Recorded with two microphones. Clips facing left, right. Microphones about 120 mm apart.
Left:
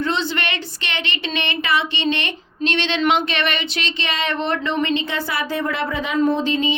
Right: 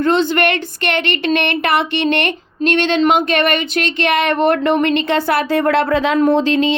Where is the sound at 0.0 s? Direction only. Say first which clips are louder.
Right 8 dB; 50° right (ahead or behind).